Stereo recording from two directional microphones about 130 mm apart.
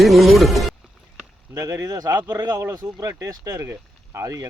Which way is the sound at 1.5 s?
30° right (ahead or behind).